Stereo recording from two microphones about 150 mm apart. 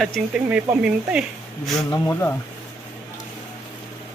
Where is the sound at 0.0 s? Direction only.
Centre (ahead or behind).